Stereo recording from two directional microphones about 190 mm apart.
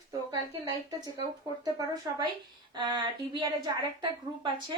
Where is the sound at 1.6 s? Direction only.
20° right (ahead or behind).